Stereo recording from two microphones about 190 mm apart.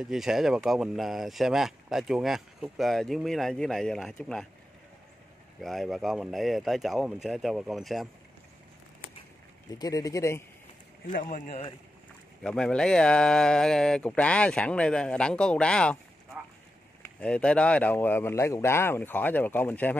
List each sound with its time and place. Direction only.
0.0 s speech: centre (ahead or behind)
5.6 s speech: centre (ahead or behind)
9.7 s speech: 20° left (ahead or behind)
11.1 s speech: 45° left (ahead or behind)
12.4 s speech: 5° left (ahead or behind)
17.2 s speech: 5° left (ahead or behind)